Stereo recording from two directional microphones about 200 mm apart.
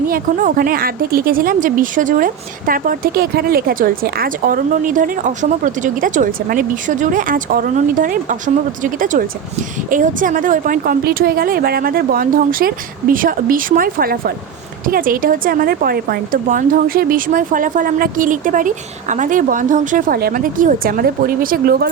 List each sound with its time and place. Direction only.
0.1 s speech: 45° right (ahead or behind)